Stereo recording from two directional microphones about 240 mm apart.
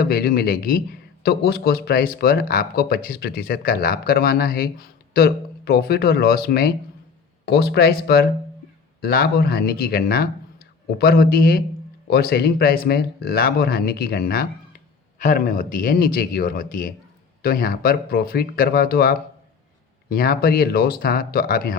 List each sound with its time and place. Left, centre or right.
0.0 s speech: left